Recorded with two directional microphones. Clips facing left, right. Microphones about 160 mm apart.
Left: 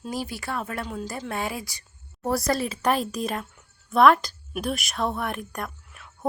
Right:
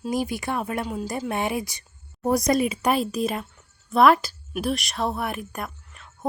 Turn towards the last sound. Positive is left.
turn(degrees=0)  # may be behind; listen again after turning